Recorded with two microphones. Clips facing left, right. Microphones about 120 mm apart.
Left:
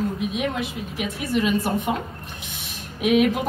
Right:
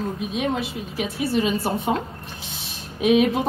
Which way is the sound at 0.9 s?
30° right (ahead or behind).